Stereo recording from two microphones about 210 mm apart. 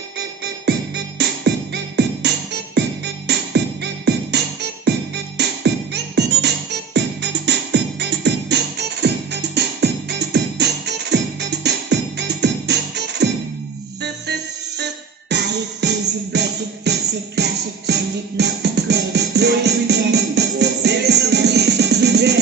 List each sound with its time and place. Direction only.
0.7 s music: 50° right (ahead or behind)